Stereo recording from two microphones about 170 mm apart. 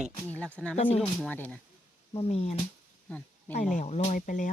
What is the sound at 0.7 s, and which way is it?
Speech, 35° left (ahead or behind).